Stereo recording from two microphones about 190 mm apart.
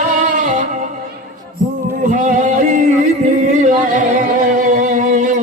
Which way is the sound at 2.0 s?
45° right (ahead or behind).